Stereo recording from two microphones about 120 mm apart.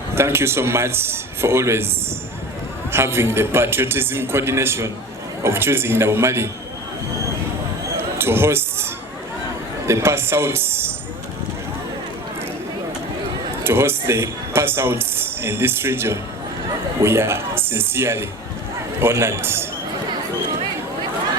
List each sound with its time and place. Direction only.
0.1 s speech: 20° right (ahead or behind)
2.9 s speech: 20° right (ahead or behind)
8.2 s speech: 20° right (ahead or behind)
13.7 s speech: 20° right (ahead or behind)